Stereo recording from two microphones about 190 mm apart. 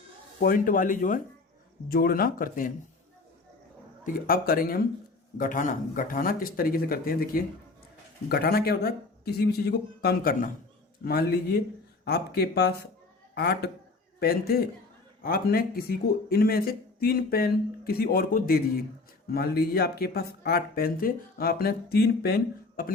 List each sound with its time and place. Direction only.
0.3 s speech: 50° left (ahead or behind)
4.0 s speech: 50° left (ahead or behind)